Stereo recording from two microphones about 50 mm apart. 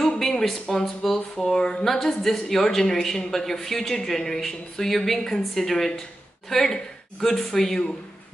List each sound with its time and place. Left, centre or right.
0.0 s speech: centre